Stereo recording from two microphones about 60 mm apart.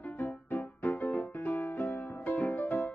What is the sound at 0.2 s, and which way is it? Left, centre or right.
Music, left.